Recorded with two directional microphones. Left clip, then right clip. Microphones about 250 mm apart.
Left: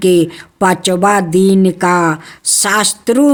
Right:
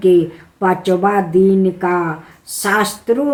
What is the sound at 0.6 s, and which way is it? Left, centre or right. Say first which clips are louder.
Speech: left 3 dB; left.